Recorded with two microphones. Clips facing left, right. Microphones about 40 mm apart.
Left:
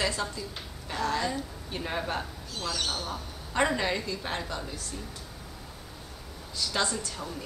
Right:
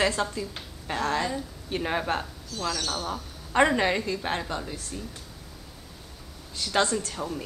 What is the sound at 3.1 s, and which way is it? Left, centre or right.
A woman's voice, right.